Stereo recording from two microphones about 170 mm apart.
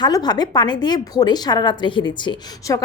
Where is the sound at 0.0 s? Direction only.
25° left (ahead or behind).